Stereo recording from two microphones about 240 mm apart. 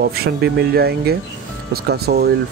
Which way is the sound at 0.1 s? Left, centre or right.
Right.